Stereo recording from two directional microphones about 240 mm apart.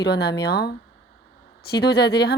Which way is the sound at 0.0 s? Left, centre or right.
Left.